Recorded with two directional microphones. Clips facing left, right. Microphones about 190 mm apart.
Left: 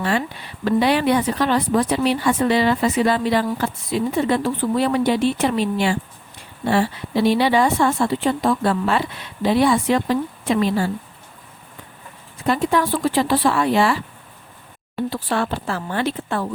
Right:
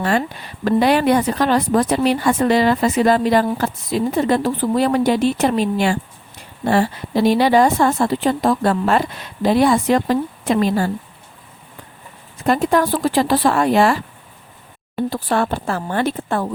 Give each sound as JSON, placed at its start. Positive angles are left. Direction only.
{"t": 0.0, "sound": "speech", "side_deg": -45}
{"t": 12.5, "sound": "speech", "side_deg": -45}
{"t": 15.1, "sound": "speech", "side_deg": -45}